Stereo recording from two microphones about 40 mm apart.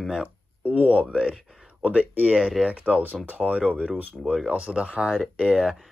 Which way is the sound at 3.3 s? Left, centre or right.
Right.